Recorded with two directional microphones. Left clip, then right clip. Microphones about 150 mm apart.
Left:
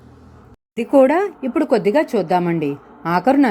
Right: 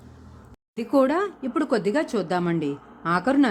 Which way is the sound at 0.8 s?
15° left (ahead or behind).